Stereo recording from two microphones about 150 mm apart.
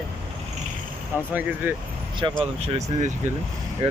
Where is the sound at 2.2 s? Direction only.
25° right (ahead or behind).